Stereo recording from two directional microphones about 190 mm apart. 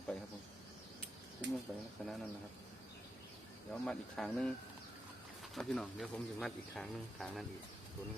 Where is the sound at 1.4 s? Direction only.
65° right (ahead or behind).